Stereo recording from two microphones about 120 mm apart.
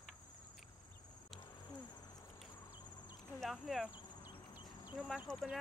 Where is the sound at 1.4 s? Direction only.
35° left (ahead or behind).